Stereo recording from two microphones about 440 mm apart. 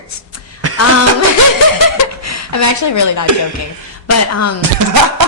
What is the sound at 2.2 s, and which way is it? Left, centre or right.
Speech, left.